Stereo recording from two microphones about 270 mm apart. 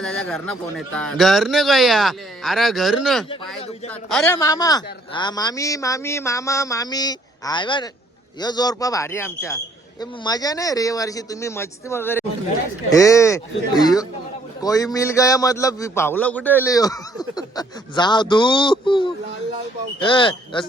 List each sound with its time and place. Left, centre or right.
0.0 s a man's voice: centre